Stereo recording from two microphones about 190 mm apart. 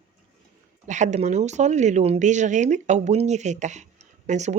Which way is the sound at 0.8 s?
40° right (ahead or behind).